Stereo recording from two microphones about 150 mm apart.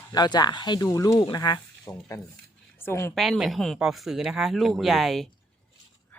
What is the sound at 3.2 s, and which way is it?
Speech, centre (ahead or behind).